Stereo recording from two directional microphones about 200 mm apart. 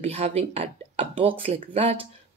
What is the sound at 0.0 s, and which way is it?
Speech, 30° right (ahead or behind).